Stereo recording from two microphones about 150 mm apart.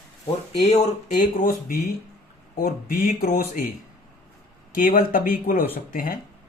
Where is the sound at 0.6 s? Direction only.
45° left (ahead or behind).